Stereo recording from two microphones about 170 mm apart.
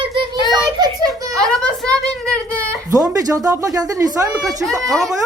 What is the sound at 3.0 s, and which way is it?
Speech, 20° right (ahead or behind).